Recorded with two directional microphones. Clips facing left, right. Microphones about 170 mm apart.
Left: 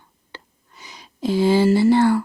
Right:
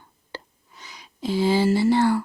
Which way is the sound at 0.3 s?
40° right (ahead or behind).